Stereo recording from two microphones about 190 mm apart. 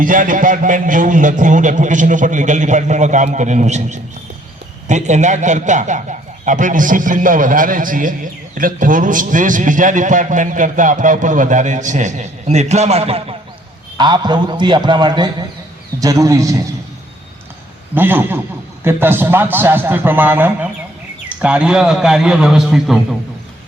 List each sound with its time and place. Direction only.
0.0 s a man's voice: 45° right (ahead or behind); by 16.6 s 15° right (ahead or behind)
17.9 s a man's voice: 10° right (ahead or behind)